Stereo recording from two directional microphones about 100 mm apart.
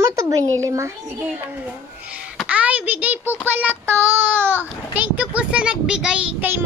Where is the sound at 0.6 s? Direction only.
30° right (ahead or behind).